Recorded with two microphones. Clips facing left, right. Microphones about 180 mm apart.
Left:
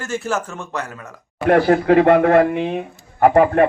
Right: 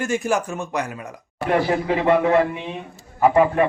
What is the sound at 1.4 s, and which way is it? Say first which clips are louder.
Speech: left 6 dB; 55° left (ahead or behind).